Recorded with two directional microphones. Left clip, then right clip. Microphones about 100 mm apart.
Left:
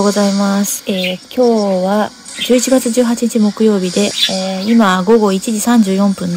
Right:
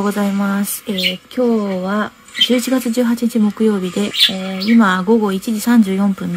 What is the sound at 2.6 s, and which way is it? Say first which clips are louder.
Speech: left 5 dB; 25° left (ahead or behind).